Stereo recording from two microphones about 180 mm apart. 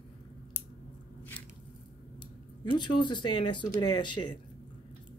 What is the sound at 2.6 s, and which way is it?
Speech, 25° left (ahead or behind).